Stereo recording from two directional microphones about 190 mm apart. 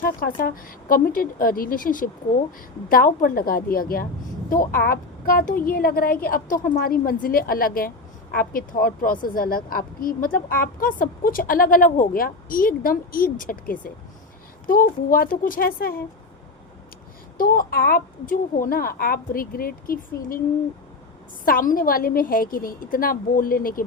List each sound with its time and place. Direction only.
0.0 s a woman's voice: 50° left (ahead or behind)
17.3 s a woman's voice: 50° left (ahead or behind)
21.4 s a woman's voice: 45° left (ahead or behind)